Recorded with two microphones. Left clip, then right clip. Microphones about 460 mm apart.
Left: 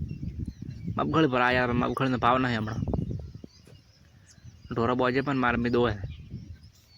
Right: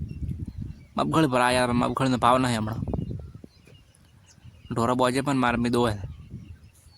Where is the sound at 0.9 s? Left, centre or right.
Right.